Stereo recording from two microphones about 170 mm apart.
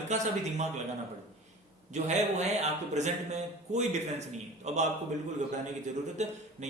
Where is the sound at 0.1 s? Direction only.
40° right (ahead or behind).